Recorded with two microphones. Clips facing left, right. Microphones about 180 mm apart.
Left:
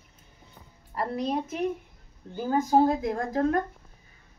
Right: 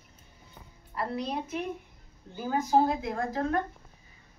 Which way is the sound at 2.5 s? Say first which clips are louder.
Left 3 dB; 40° left (ahead or behind).